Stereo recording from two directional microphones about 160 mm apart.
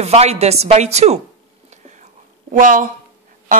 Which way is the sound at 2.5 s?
55° right (ahead or behind).